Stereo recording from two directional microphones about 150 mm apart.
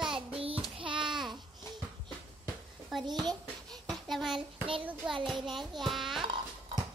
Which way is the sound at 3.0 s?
30° right (ahead or behind).